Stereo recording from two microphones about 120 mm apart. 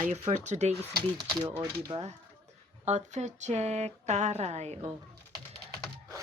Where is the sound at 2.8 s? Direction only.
80° right.